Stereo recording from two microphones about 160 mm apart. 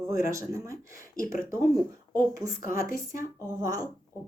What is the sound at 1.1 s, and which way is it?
Speech, 60° left (ahead or behind).